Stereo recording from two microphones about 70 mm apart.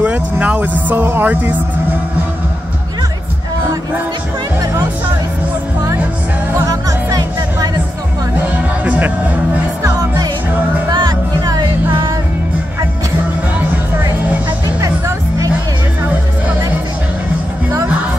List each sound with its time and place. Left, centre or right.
0.0 s speech: right
6.7 s music: right
8.8 s music: right
9.8 s music: right
10.9 s music: right